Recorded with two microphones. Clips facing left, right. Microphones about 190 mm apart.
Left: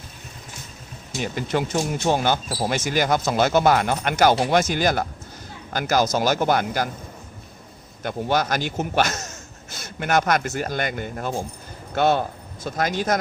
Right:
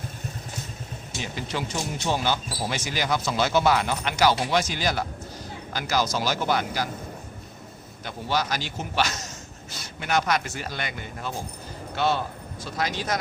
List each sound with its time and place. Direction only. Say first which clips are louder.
1.2 s speech: left 7 dB; 50° left (ahead or behind)
8.0 s speech: left 5 dB; 50° left (ahead or behind)